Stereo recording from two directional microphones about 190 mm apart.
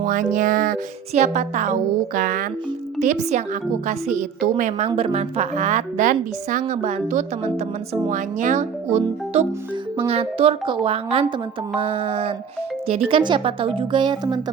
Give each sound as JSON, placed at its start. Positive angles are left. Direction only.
{"t": 0.0, "sound": "a woman's voice", "side_deg": -45}
{"t": 4.9, "sound": "a woman's voice", "side_deg": -30}